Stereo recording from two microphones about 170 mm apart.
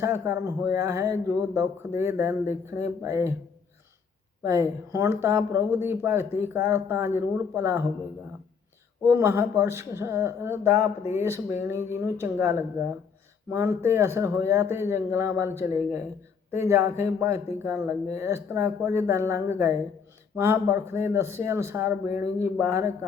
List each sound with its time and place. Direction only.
0.0 s speech: 15° right (ahead or behind)
4.4 s speech: 15° right (ahead or behind)
9.0 s speech: 15° right (ahead or behind)